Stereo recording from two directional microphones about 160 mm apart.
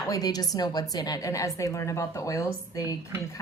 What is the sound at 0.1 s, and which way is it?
A woman's voice, 25° left (ahead or behind).